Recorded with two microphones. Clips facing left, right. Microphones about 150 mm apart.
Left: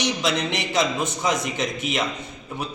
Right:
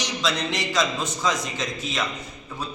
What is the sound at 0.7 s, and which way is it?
A man's voice, 25° left (ahead or behind).